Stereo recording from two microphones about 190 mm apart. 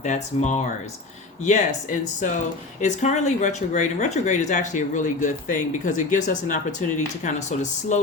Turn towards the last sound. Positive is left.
turn(degrees=40)  # may be behind; listen again after turning